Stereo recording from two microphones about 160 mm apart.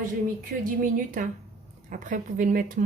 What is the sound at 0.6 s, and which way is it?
A woman's voice, 55° right (ahead or behind).